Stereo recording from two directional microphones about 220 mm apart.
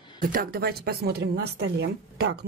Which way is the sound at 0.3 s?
40° right (ahead or behind).